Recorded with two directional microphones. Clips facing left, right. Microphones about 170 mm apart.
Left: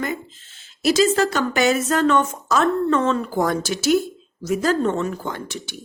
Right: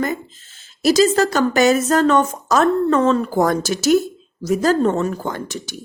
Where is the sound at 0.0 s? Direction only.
40° right (ahead or behind).